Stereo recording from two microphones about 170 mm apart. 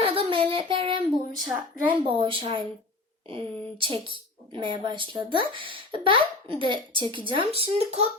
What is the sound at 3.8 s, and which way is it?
Speech, 30° right (ahead or behind).